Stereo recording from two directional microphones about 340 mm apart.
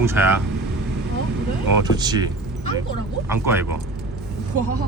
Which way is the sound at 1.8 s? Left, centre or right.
Centre.